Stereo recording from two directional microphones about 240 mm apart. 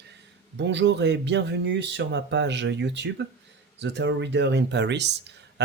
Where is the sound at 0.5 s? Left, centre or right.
Right.